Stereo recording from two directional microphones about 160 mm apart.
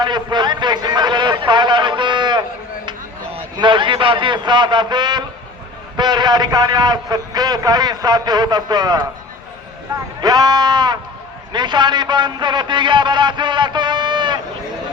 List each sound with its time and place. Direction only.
0.0 s a sound: 25° right (ahead or behind)
2.8 s a man's voice: 35° right (ahead or behind)
10.2 s a man's voice: 25° right (ahead or behind)